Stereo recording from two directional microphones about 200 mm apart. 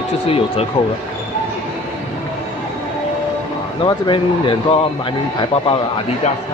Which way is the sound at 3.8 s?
25° left (ahead or behind).